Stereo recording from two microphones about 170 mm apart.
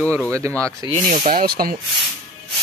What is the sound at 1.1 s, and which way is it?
Speech, 55° right (ahead or behind).